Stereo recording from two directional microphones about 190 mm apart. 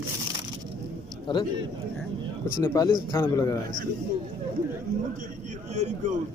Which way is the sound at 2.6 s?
15° left (ahead or behind).